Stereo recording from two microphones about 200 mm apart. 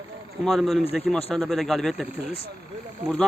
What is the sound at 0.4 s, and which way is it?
Speech, centre (ahead or behind).